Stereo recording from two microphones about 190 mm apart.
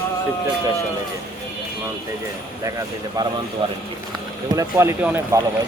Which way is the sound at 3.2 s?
20° right (ahead or behind).